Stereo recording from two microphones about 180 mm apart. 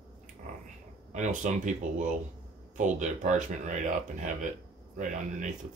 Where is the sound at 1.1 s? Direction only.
45° right (ahead or behind).